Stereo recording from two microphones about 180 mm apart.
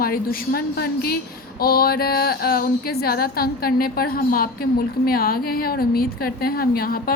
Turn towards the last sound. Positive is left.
turn(degrees=55)  # may be behind; listen again after turning